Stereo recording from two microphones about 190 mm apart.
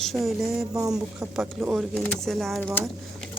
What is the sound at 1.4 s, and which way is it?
Speech, centre (ahead or behind).